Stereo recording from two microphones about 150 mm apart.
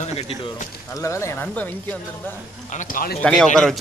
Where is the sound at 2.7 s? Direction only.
60° left (ahead or behind).